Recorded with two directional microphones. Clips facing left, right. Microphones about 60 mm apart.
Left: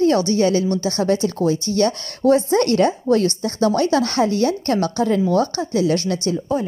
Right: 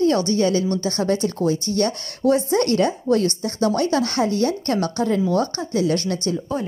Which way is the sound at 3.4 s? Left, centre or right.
Left.